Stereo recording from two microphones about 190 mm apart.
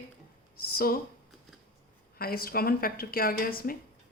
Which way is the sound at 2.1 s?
50° left (ahead or behind).